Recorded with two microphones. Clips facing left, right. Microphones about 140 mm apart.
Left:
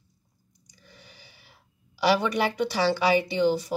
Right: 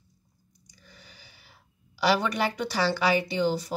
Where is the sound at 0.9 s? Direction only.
20° left (ahead or behind).